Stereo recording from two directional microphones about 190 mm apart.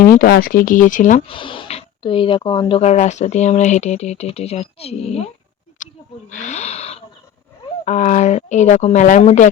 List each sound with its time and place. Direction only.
0.0 s speech: 50° left (ahead or behind)
1.3 s speech: 25° left (ahead or behind)
5.8 s a sound: 40° left (ahead or behind)
6.3 s speech: 35° left (ahead or behind)